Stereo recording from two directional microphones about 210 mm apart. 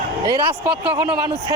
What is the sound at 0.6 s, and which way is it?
Speech, 5° right (ahead or behind).